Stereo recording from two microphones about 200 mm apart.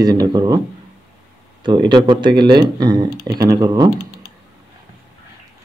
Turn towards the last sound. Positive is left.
turn(degrees=-20)  # may be behind; listen again after turning